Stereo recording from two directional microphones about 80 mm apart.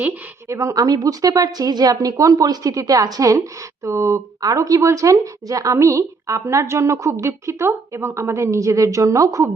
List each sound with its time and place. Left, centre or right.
0.4 s a woman's voice: right
3.8 s speech: right
4.4 s speech: right